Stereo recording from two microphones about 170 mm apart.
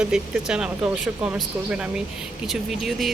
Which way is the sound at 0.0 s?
5° right (ahead or behind).